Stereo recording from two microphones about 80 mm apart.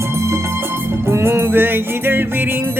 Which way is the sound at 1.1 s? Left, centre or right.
Right.